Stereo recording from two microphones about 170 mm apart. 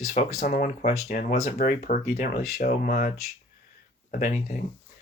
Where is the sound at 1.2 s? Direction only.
45° left (ahead or behind).